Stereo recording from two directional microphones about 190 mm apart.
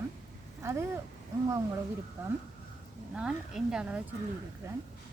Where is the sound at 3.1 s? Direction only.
5° right (ahead or behind).